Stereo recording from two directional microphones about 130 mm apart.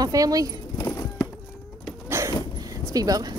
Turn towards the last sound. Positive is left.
turn(degrees=-30)  # may be behind; listen again after turning